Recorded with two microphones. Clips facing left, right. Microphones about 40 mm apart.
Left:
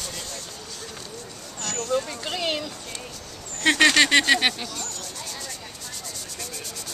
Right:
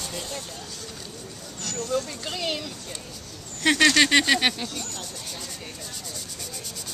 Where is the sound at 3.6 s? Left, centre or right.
Centre.